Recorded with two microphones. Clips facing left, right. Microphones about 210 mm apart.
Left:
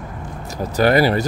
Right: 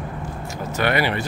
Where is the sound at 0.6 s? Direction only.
40° left (ahead or behind).